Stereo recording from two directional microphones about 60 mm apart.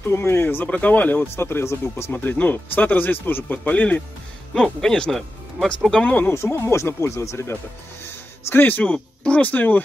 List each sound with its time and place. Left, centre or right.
0.0 s speech: left
0.7 s speech: left
2.1 s speech: left
4.8 s speech: centre
6.2 s speech: left
8.5 s speech: left